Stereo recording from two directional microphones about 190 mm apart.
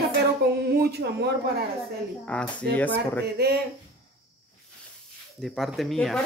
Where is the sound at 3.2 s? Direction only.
60° right (ahead or behind).